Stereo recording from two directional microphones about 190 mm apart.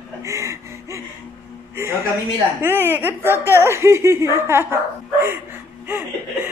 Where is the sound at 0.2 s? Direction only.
15° right (ahead or behind).